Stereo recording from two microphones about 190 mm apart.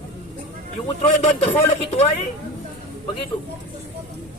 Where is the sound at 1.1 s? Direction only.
40° left (ahead or behind).